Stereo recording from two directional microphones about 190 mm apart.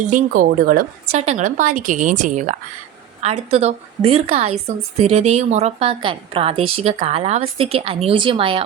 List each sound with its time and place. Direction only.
0.0 s a woman's voice: 45° right (ahead or behind); by 8.6 s 30° right (ahead or behind)